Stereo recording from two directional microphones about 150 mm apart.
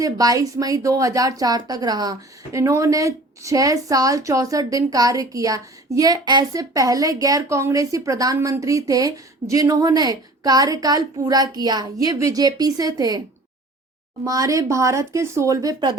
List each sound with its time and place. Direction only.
0.0 s speech: 25° right (ahead or behind)
14.3 s speech: 20° right (ahead or behind)